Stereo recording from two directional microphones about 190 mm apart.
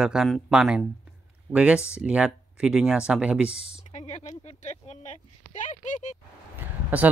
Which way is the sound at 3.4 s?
35° left (ahead or behind).